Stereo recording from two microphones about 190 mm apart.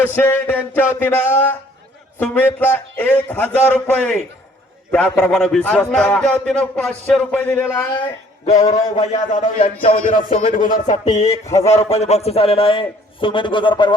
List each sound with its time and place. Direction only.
0.1 s a man's voice: 10° left (ahead or behind)
8.0 s a man's voice: 35° left (ahead or behind)
9.9 s music: 45° left (ahead or behind)
11.6 s a man's voice: 35° left (ahead or behind)